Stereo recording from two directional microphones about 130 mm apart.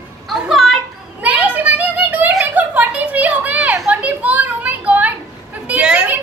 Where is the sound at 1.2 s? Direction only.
10° right (ahead or behind).